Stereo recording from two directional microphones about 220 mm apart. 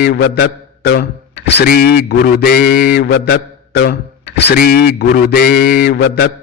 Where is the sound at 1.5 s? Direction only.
45° left (ahead or behind).